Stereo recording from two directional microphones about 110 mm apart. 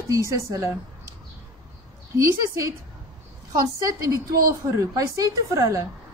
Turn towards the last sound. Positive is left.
turn(degrees=-30)  # may be behind; listen again after turning